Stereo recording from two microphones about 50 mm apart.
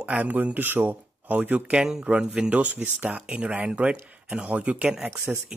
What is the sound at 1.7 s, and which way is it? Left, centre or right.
Speech, centre.